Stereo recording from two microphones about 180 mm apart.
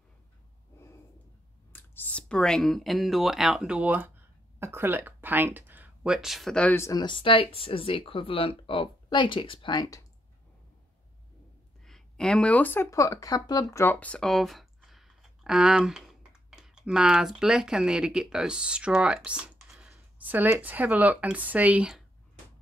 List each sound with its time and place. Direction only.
1.7 s speech: 5° left (ahead or behind)
11.8 s speech: centre (ahead or behind)